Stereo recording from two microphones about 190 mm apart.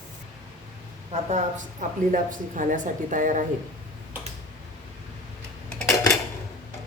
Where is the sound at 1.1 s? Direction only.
40° right (ahead or behind).